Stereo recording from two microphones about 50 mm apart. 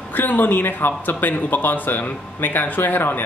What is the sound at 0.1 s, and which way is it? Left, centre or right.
Speech, left.